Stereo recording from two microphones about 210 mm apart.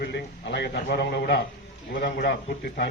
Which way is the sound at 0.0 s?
55° left (ahead or behind).